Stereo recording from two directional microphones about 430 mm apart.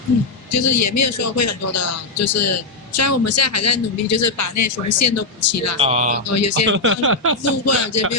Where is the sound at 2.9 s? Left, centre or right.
Left.